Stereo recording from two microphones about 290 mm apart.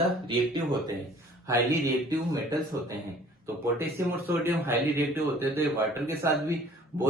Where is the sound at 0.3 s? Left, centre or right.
Centre.